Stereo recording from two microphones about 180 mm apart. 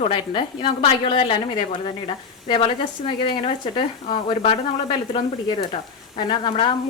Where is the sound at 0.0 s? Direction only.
30° left (ahead or behind).